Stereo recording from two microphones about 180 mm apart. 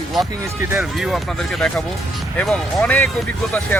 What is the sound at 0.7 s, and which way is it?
Speech, 5° right (ahead or behind).